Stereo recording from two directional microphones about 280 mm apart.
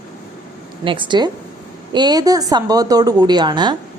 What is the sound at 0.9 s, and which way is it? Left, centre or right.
Speech, centre.